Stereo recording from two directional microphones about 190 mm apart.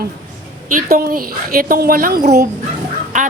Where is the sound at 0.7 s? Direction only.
45° right (ahead or behind).